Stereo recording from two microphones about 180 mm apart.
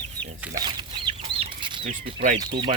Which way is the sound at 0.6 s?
25° right (ahead or behind).